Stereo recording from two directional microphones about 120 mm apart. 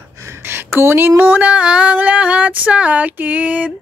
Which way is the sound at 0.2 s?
20° right (ahead or behind).